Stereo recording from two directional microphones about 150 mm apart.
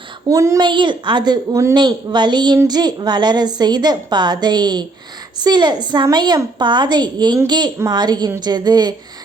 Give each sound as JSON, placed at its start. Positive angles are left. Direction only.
{"t": 0.3, "sound": "a woman's voice", "side_deg": -20}